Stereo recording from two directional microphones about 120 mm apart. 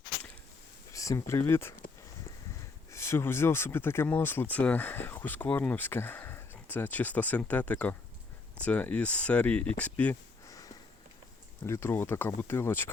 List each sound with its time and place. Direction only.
0.9 s speech: 25° left (ahead or behind)
2.9 s speech: 20° left (ahead or behind)
10.5 s sniff: 30° left (ahead or behind)
11.6 s speech: 20° left (ahead or behind)